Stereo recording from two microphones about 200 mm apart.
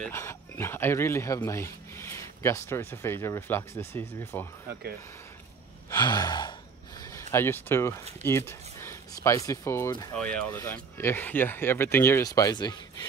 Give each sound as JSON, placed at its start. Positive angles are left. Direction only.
{"t": 0.0, "sound": "speech", "side_deg": 15}
{"t": 5.9, "sound": "sigh", "side_deg": 20}
{"t": 7.0, "sound": "a sound", "side_deg": 15}
{"t": 8.2, "sound": "speech", "side_deg": 10}
{"t": 10.1, "sound": "speech", "side_deg": 5}